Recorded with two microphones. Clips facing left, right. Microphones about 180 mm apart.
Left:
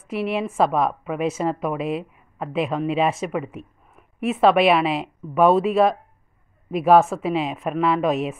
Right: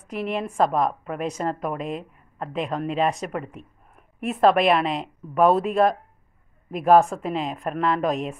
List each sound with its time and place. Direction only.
0.1 s a woman's voice: 5° left (ahead or behind)